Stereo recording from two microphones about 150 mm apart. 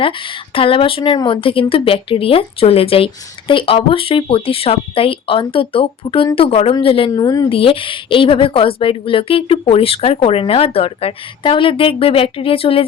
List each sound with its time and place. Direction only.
0.0 s speech: 35° left (ahead or behind)
7.1 s speech: 25° left (ahead or behind)